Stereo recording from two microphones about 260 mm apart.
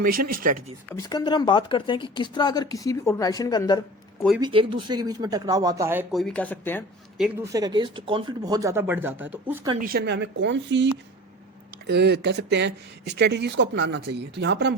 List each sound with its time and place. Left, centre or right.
0.0 s speech: right
0.9 s speech: centre
4.4 s speech: centre
7.3 s speech: centre
9.7 s speech: right
11.9 s speech: right